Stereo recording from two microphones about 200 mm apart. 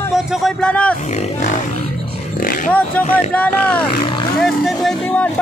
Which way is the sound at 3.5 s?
25° left (ahead or behind).